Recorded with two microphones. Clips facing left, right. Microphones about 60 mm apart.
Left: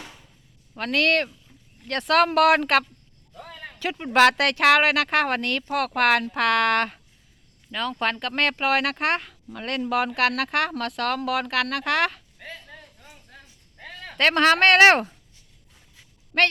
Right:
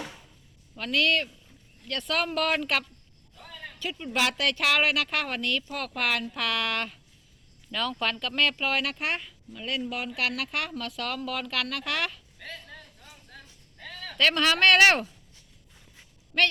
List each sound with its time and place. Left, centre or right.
0.8 s speech: left
3.3 s a sound: left
4.1 s speech: left
7.7 s speech: left
8.4 s speech: left
10.3 s speech: left
12.4 s a sound: centre
13.7 s a sound: left
14.8 s speech: left
16.3 s speech: left